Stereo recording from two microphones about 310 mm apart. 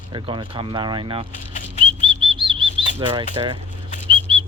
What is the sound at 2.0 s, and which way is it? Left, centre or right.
Chirp, centre.